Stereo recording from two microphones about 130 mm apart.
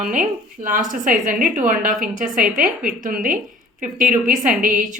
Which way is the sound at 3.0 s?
90° right.